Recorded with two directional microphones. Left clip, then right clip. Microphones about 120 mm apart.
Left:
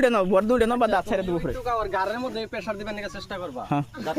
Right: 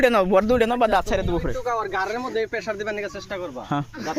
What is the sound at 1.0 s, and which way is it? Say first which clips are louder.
Speech: right 2 dB; 40° right (ahead or behind).